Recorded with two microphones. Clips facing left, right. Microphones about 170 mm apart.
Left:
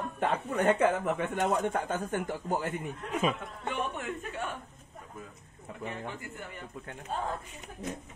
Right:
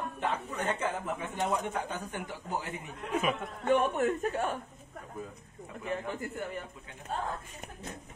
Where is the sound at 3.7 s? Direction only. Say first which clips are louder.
Right 9 dB; 45° right (ahead or behind).